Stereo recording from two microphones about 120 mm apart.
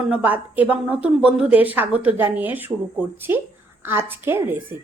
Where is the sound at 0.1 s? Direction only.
10° right (ahead or behind).